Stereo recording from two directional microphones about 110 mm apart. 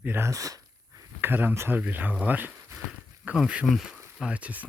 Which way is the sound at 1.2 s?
20° right (ahead or behind).